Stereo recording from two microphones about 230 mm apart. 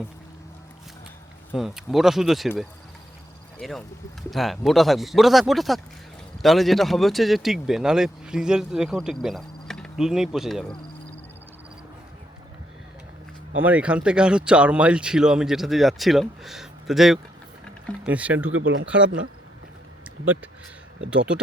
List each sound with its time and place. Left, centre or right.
1.5 s speech: centre
3.6 s speech: centre
13.6 s speech: centre
18.5 s speech: right
18.9 s speech: centre